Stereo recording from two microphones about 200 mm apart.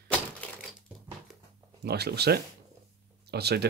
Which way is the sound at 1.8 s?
55° right (ahead or behind).